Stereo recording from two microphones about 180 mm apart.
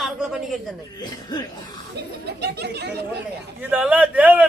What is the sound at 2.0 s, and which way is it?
Speech, 65° right (ahead or behind).